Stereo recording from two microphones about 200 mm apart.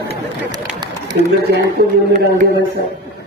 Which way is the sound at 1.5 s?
55° right (ahead or behind).